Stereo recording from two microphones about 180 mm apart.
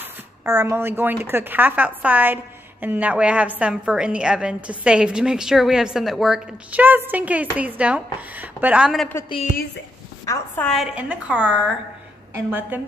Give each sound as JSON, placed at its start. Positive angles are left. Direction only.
{"t": 0.0, "sound": "a woman's voice", "side_deg": -15}
{"t": 10.2, "sound": "a woman's voice", "side_deg": 15}